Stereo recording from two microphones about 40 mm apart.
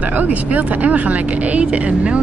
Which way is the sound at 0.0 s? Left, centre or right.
Right.